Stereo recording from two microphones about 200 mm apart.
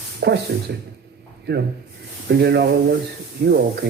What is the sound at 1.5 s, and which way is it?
Speech, 55° right (ahead or behind).